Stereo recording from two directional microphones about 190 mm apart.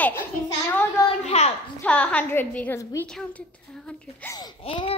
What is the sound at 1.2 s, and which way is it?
Speech, 35° left (ahead or behind).